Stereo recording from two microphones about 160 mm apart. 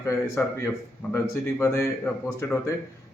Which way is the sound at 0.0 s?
15° left (ahead or behind).